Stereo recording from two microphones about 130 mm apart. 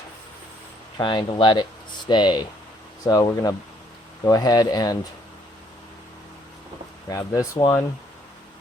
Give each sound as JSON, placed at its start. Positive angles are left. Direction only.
{"t": 0.9, "sound": "speech", "side_deg": 35}
{"t": 7.1, "sound": "speech", "side_deg": 25}